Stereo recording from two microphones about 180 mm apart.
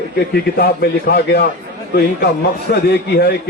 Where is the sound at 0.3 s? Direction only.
65° left (ahead or behind).